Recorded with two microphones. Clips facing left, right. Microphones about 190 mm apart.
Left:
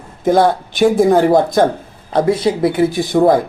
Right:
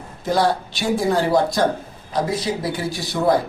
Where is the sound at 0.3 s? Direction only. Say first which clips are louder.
Left 7 dB; 55° left (ahead or behind).